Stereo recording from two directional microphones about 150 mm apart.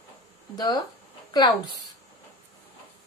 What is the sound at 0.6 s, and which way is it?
A woman's voice, 25° left (ahead or behind).